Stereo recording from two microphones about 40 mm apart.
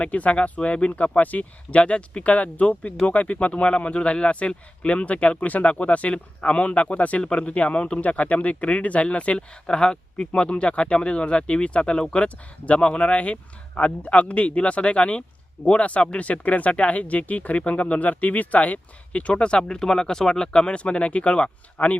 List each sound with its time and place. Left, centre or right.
0.0 s speech: left
7.2 s speech: left
9.6 s speech: centre